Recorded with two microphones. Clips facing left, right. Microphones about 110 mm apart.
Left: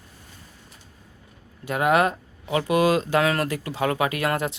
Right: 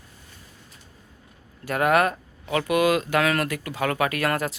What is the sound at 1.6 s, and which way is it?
Speech, 20° left (ahead or behind).